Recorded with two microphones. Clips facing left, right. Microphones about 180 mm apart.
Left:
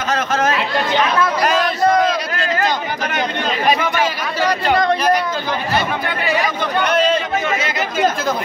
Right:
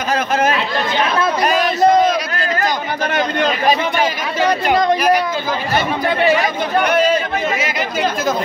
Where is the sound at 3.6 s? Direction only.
30° right (ahead or behind).